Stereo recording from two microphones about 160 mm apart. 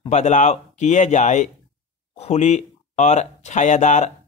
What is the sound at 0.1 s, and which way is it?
Speech, 50° left (ahead or behind).